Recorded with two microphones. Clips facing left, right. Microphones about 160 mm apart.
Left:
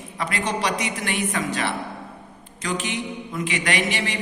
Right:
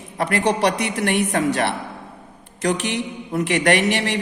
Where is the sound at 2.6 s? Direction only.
65° right (ahead or behind).